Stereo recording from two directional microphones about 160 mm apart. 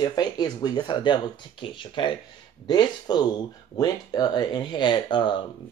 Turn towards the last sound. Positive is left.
turn(degrees=30)  # may be behind; listen again after turning